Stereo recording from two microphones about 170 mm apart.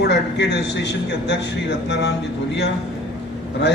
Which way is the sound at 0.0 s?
90° left.